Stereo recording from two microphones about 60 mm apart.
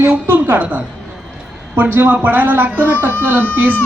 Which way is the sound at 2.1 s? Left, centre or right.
Right.